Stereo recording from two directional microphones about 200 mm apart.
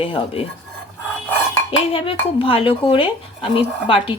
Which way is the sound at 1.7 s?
25° left (ahead or behind).